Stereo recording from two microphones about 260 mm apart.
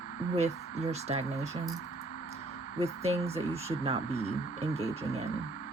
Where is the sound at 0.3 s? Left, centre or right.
Right.